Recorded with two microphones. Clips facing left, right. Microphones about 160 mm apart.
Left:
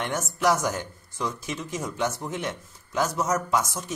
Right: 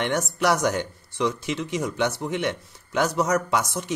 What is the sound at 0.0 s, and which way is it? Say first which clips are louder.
Speech: right 2 dB; 70° right (ahead or behind).